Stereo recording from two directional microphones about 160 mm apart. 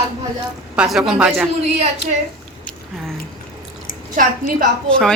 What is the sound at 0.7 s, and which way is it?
Speech, 5° right (ahead or behind).